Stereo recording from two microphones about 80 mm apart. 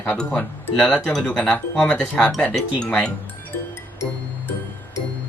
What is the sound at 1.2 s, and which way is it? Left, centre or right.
Speech, centre.